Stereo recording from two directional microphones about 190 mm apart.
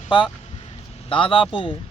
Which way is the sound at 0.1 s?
25° left (ahead or behind).